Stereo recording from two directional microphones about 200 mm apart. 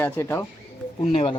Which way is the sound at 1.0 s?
30° left (ahead or behind).